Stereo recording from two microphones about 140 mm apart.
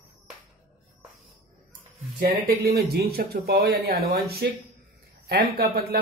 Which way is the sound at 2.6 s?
90° right.